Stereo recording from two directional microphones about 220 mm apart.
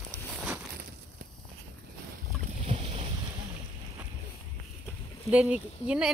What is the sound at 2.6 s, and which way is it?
Boat, 25° right (ahead or behind).